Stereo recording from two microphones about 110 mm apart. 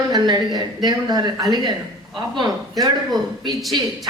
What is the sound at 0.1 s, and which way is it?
Speech, 40° right (ahead or behind).